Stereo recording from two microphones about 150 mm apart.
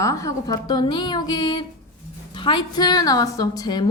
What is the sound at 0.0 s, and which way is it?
A woman's voice, 20° left (ahead or behind).